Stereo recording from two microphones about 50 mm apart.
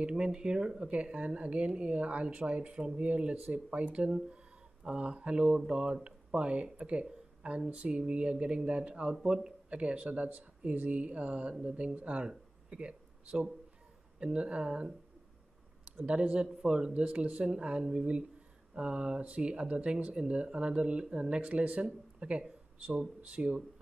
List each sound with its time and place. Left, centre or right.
0.1 s speech: centre
12.3 s a sound: centre
14.2 s speech: right
17.0 s speech: right